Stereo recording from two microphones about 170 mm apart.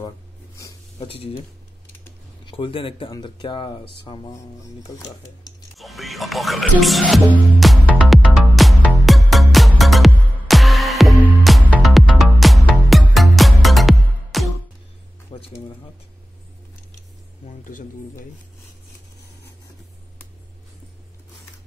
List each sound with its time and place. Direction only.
0.9 s speech: 35° left (ahead or behind)
2.4 s speech: 30° left (ahead or behind)
5.8 s music: centre (ahead or behind)
15.3 s a sound: 25° left (ahead or behind)
17.6 s speech: 50° left (ahead or behind)